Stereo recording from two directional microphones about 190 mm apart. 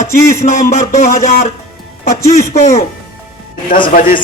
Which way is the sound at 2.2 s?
15° left (ahead or behind).